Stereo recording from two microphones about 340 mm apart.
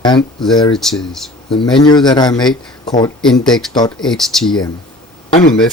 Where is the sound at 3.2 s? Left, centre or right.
Centre.